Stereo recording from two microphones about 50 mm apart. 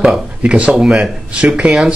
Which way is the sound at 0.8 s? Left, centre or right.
Centre.